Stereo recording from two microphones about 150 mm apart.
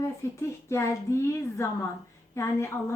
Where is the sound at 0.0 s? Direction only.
20° left (ahead or behind).